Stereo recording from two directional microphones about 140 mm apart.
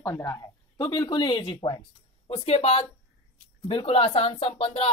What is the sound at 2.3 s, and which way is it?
Speech, 50° left (ahead or behind).